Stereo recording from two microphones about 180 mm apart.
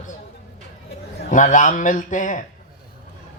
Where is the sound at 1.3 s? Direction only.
45° left (ahead or behind).